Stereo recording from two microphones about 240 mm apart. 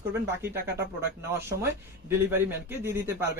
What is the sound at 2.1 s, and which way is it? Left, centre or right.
Speech, centre.